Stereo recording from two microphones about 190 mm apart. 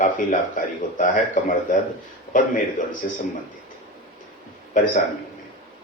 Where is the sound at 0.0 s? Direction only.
45° left (ahead or behind).